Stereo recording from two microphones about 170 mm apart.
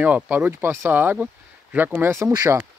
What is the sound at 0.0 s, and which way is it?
Speech, 10° right (ahead or behind).